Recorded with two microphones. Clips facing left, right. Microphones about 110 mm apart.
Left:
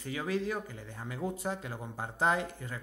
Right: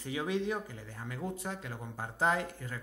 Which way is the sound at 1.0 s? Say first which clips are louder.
Left 3 dB; 15° left (ahead or behind).